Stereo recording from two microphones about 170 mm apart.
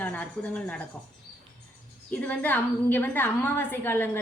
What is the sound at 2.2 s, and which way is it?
A woman's voice, 10° left (ahead or behind).